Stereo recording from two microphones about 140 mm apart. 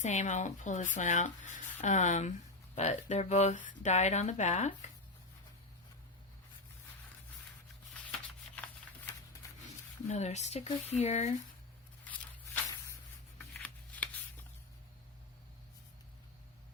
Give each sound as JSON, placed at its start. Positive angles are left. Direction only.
{"t": 0.0, "sound": "speech", "side_deg": 60}
{"t": 10.1, "sound": "speech", "side_deg": 55}
{"t": 13.4, "sound": "shuffling cards", "side_deg": 10}